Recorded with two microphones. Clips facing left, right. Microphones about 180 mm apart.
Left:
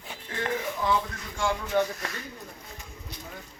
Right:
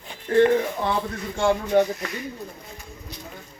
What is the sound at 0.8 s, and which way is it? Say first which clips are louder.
Speech: right 1 dB; 65° right (ahead or behind).